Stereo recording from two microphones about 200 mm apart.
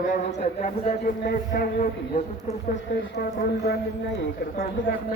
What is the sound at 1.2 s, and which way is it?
A man's voice, 50° left (ahead or behind).